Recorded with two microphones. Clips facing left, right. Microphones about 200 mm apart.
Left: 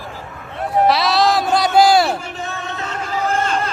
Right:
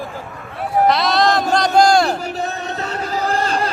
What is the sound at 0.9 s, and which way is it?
Music, centre (ahead or behind).